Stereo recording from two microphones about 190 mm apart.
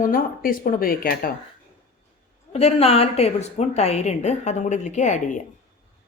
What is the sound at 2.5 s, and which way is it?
A woman's voice, 30° left (ahead or behind).